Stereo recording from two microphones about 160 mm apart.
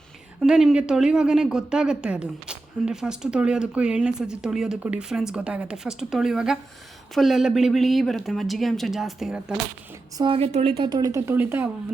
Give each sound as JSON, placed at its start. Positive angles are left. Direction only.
{"t": 0.4, "sound": "speech", "side_deg": -5}
{"t": 10.2, "sound": "speech", "side_deg": -35}